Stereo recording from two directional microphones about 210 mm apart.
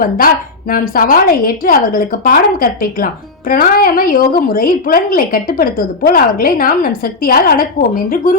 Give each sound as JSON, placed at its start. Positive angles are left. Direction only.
{"t": 0.7, "sound": "a woman's voice", "side_deg": 40}